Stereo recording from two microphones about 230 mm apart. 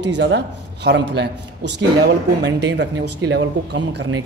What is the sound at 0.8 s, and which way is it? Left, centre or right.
Speech, right.